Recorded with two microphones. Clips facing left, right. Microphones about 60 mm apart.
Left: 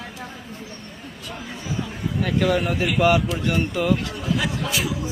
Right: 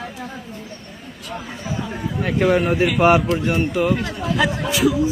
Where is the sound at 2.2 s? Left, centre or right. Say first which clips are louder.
Right 4 dB; right.